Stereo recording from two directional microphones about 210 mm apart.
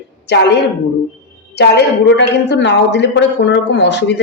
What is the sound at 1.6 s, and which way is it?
A woman's voice, 55° left (ahead or behind).